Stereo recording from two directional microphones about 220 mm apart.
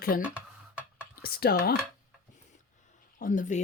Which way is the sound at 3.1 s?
35° left (ahead or behind).